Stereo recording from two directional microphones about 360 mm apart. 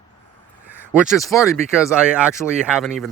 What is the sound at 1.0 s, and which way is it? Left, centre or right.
Speech, centre.